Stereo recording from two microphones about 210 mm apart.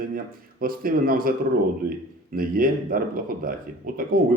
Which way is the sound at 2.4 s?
45° right (ahead or behind).